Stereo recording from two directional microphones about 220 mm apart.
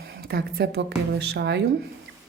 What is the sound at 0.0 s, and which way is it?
A woman's voice, 45° right (ahead or behind).